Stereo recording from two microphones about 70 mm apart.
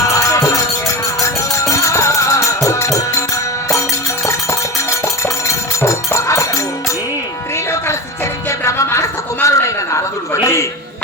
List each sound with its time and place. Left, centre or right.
0.1 s music: left
4.9 s music: left
8.4 s music: left
10.4 s a sound: left